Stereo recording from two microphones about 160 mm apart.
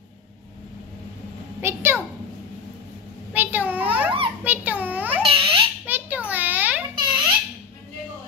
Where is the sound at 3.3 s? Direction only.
10° right (ahead or behind).